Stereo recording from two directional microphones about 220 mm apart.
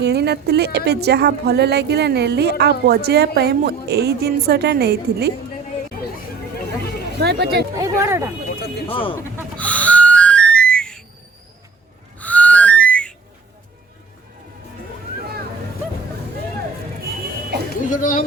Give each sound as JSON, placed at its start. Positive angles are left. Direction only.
{"t": 0.0, "sound": "a woman's voice", "side_deg": -50}
{"t": 7.2, "sound": "speech", "side_deg": -50}
{"t": 7.8, "sound": "speech", "side_deg": -10}
{"t": 8.9, "sound": "speech", "side_deg": 25}
{"t": 9.6, "sound": "music", "side_deg": 5}
{"t": 12.2, "sound": "whistling", "side_deg": 5}
{"t": 17.8, "sound": "a sound", "side_deg": 35}